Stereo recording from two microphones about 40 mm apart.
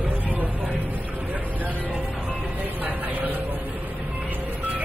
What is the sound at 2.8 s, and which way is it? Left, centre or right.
Vehicle, right.